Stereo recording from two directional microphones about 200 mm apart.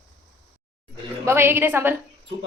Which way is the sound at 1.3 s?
10° right (ahead or behind).